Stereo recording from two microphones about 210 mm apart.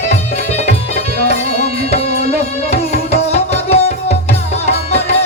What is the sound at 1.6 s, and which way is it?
Music, 30° left (ahead or behind).